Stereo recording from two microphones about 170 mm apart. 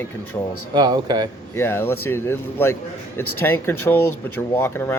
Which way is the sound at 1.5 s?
15° left (ahead or behind).